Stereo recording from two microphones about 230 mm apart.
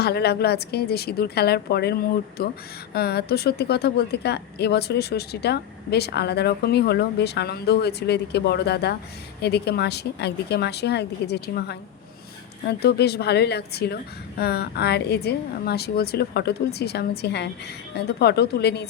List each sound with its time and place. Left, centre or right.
0.0 s a woman's voice: left